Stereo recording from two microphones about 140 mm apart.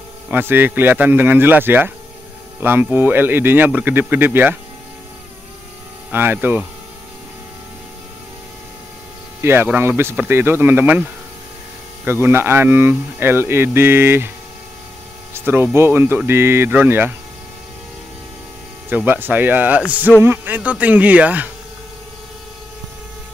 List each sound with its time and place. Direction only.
0.3 s speech: 15° right (ahead or behind)
6.1 s speech: 15° right (ahead or behind)
9.4 s speech: 15° right (ahead or behind)
15.3 s speech: 15° right (ahead or behind)
18.9 s speech: 15° right (ahead or behind)